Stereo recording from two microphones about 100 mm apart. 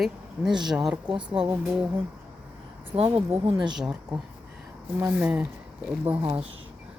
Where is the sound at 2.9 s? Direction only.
15° right (ahead or behind).